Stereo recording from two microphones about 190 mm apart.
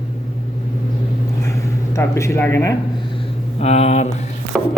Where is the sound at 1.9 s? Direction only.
15° left (ahead or behind).